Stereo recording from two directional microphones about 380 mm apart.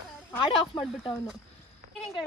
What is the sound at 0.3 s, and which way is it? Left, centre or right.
Speech, centre.